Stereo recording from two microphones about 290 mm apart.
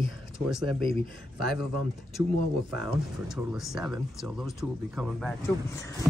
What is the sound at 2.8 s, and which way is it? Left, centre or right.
Speech, centre.